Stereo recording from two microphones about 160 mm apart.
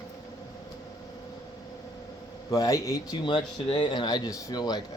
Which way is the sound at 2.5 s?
20° left (ahead or behind).